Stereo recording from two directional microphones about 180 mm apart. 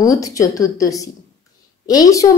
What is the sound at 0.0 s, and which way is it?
A woman's voice, 20° left (ahead or behind).